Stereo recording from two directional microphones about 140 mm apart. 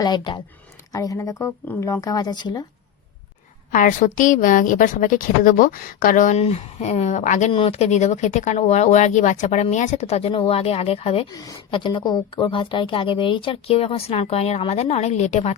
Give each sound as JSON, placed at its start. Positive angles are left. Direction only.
{"t": 0.0, "sound": "speech", "side_deg": 30}
{"t": 3.7, "sound": "a woman's voice", "side_deg": 70}
{"t": 6.3, "sound": "speech", "side_deg": 50}
{"t": 7.5, "sound": "speech", "side_deg": 45}
{"t": 11.3, "sound": "a woman's voice", "side_deg": 25}